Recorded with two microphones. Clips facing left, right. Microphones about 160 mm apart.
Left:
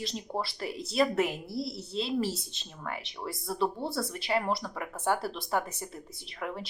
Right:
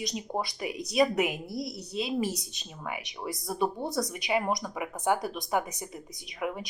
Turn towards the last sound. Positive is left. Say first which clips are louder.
# right 3 dB
turn(degrees=-10)  # may be behind; listen again after turning